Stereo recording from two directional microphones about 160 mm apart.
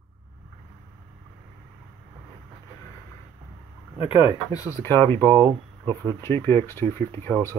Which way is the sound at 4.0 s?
30° left (ahead or behind).